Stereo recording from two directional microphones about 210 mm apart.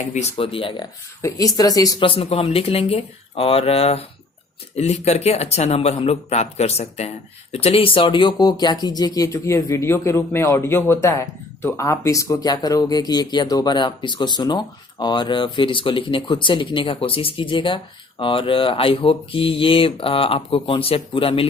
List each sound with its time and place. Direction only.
0.1 s speech: 30° left (ahead or behind)